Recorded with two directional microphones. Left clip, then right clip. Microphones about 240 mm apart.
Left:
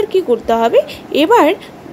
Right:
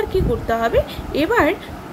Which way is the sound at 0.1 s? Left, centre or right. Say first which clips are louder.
Left 7 dB; left.